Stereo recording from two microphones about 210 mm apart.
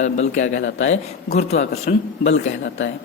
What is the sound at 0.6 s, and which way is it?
Speech, 65° left (ahead or behind).